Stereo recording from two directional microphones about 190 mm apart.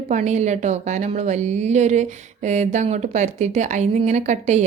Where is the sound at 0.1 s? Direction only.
35° right (ahead or behind).